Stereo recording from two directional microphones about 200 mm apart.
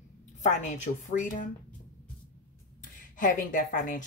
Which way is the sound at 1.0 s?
40° left (ahead or behind).